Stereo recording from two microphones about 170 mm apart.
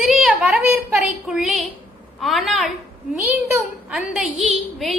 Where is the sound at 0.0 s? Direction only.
Centre (ahead or behind).